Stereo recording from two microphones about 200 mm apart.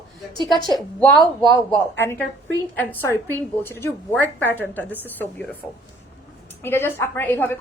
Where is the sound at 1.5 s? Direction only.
15° left (ahead or behind).